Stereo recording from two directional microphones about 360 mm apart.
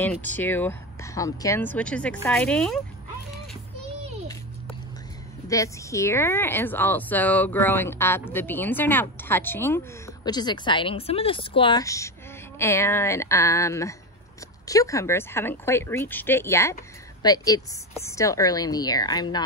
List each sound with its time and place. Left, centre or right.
0.0 s a woman's voice: centre
5.5 s a woman's voice: centre